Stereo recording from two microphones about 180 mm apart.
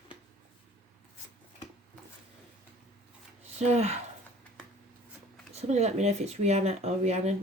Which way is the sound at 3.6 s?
35° right (ahead or behind).